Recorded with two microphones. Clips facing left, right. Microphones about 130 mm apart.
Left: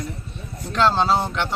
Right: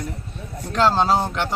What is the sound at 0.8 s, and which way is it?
Speech, 10° right (ahead or behind).